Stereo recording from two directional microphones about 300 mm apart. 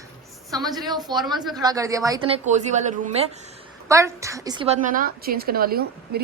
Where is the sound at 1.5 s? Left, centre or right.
Centre.